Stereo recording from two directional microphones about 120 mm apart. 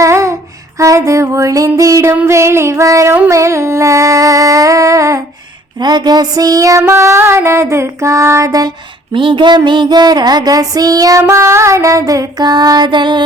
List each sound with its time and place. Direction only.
0.0 s a sound: 25° right (ahead or behind)
0.8 s music: 25° right (ahead or behind)
3.2 s a sound: 25° right (ahead or behind)
5.8 s music: 35° right (ahead or behind)
9.1 s female singing: 45° right (ahead or behind)
11.2 s music: 25° right (ahead or behind); by 13.2 s 40° right (ahead or behind)